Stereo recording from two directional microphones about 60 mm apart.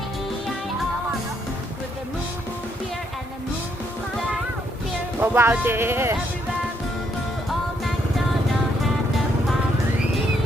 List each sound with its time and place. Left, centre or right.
5.2 s speech: right